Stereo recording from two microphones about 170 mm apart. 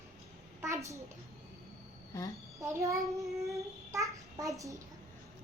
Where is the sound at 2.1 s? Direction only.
15° left (ahead or behind).